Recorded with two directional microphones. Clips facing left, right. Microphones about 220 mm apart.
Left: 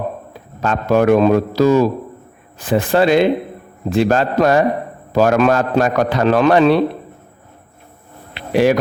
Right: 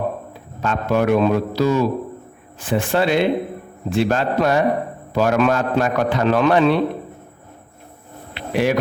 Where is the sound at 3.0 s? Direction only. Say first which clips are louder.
Left 5 dB; 90° left.